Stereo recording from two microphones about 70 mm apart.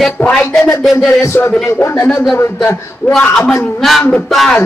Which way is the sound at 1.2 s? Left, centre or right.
Left.